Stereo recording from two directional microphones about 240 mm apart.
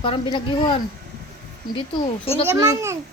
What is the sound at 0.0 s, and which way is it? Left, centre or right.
Speech, left.